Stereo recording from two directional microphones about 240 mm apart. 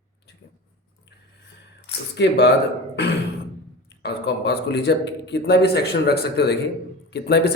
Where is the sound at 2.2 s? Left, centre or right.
Left.